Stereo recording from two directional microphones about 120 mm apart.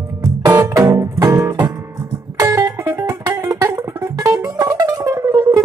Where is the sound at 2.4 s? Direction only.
30° right (ahead or behind).